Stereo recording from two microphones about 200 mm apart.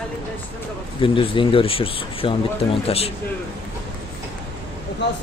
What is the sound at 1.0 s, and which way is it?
Speech, 25° left (ahead or behind).